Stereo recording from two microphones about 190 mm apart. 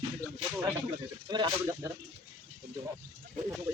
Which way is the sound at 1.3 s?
20° right (ahead or behind).